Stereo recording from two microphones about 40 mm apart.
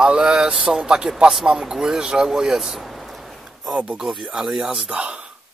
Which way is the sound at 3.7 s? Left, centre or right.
Right.